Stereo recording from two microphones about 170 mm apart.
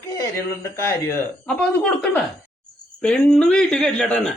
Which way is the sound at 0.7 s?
15° left (ahead or behind).